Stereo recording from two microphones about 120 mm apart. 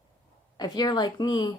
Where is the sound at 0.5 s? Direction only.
35° left (ahead or behind).